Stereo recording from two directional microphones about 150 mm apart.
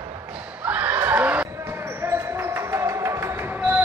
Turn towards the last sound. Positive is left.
turn(degrees=-15)  # may be behind; listen again after turning